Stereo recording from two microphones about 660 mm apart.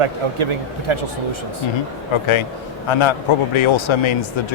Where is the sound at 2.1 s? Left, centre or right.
Left.